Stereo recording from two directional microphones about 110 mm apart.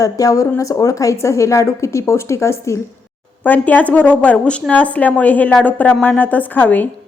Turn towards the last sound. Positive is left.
turn(degrees=15)  # may be behind; listen again after turning